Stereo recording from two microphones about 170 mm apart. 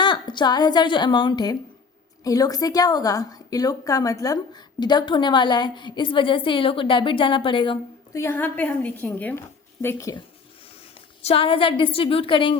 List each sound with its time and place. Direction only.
0.0 s a woman's voice: 25° left (ahead or behind)
8.1 s a woman's voice: 15° left (ahead or behind)
11.2 s a woman's voice: 35° left (ahead or behind)